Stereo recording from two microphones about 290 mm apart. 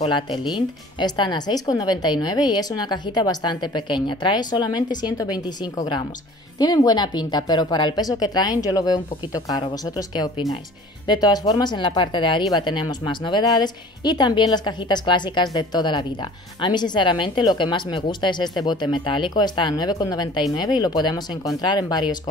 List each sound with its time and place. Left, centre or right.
0.0 s speech: centre